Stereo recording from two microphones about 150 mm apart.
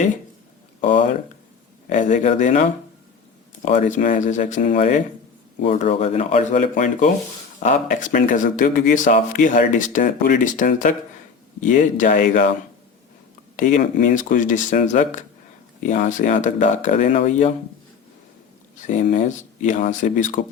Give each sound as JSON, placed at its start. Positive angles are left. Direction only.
{"t": 1.9, "sound": "speech", "side_deg": 55}
{"t": 13.6, "sound": "speech", "side_deg": 55}
{"t": 18.9, "sound": "speech", "side_deg": 55}